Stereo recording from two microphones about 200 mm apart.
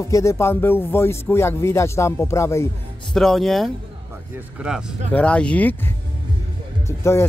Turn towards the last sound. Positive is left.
turn(degrees=15)  # may be behind; listen again after turning